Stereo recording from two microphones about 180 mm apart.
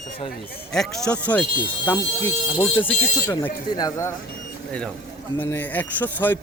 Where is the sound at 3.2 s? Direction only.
20° left (ahead or behind).